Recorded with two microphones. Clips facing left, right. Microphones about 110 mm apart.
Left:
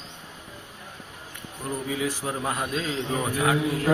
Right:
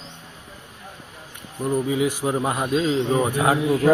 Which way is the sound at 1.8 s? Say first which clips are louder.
Right 6 dB; 15° right (ahead or behind).